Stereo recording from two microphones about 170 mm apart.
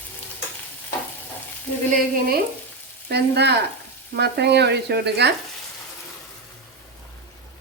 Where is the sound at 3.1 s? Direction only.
75° right (ahead or behind).